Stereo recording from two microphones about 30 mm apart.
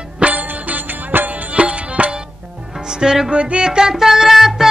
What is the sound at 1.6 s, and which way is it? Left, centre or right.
Music, right.